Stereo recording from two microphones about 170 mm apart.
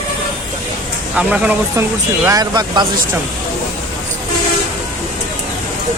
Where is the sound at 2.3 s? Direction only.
25° right (ahead or behind).